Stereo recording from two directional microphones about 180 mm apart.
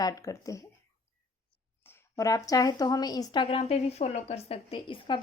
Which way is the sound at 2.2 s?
20° left (ahead or behind).